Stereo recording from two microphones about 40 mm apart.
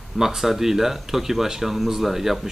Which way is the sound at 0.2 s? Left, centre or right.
Centre.